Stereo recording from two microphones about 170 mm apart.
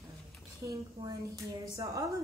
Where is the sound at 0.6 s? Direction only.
20° right (ahead or behind).